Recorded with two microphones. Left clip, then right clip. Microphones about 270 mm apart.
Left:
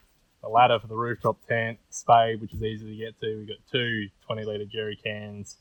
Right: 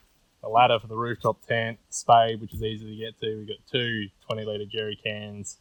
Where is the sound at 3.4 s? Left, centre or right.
Centre.